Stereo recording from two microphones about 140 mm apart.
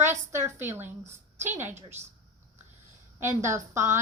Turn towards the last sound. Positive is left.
turn(degrees=-20)  # may be behind; listen again after turning